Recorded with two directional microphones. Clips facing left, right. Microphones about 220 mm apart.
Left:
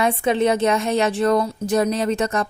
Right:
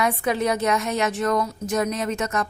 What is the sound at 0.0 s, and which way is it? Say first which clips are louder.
A woman's voice: left 4 dB; 25° left (ahead or behind).